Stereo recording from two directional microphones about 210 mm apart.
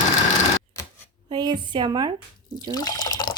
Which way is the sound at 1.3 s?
20° right (ahead or behind).